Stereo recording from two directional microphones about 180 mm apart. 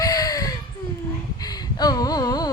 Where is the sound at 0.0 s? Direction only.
20° left (ahead or behind).